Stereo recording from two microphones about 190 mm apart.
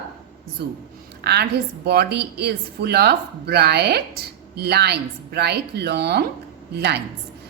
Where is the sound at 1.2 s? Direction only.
60° right (ahead or behind).